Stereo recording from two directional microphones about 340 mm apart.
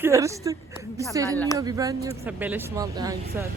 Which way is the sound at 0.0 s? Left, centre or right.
Centre.